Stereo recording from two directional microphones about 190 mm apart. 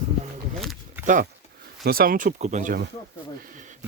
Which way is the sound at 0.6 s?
Centre (ahead or behind).